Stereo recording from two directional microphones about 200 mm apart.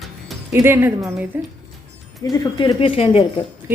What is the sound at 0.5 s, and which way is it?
Speech, 10° right (ahead or behind).